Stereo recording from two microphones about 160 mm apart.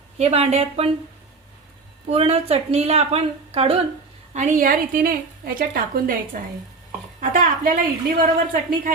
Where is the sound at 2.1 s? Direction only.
35° right (ahead or behind).